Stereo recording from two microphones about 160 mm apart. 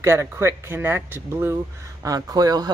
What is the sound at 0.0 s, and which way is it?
Speech, 15° right (ahead or behind).